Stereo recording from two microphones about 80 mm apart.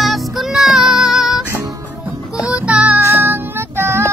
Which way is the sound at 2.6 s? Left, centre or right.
Centre.